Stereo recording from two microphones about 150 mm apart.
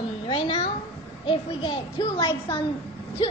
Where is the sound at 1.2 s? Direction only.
35° left (ahead or behind).